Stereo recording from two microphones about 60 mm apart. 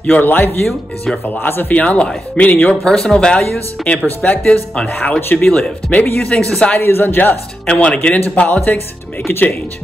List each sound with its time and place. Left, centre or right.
0.0 s speech: left
2.7 s speech: centre; by 5.5 s left
5.5 s speech: centre
5.9 s speech: left
6.3 s speech: centre
6.8 s speech: left
7.6 s speech: centre